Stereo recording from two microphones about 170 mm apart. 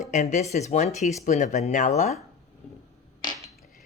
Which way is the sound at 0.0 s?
45° left (ahead or behind).